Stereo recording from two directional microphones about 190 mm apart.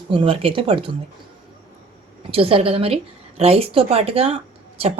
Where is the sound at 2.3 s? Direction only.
30° right (ahead or behind).